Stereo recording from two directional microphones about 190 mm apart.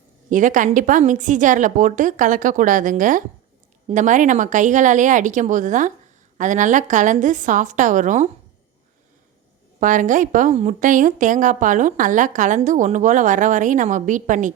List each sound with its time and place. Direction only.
0.3 s a woman's voice: 45° right (ahead or behind)
9.8 s a woman's voice: 45° right (ahead or behind)